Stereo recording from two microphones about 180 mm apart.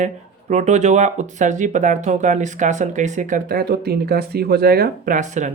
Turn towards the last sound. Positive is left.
turn(degrees=-40)  # may be behind; listen again after turning